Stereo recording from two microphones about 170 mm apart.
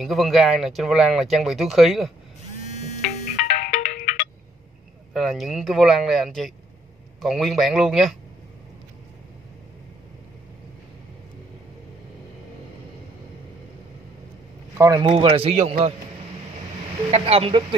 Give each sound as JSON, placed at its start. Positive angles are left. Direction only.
{"t": 0.0, "sound": "speech", "side_deg": 0}
{"t": 3.4, "sound": "ringtone", "side_deg": 55}
{"t": 5.1, "sound": "speech", "side_deg": 0}
{"t": 14.8, "sound": "a man's voice", "side_deg": -25}
{"t": 17.1, "sound": "a man's voice", "side_deg": -35}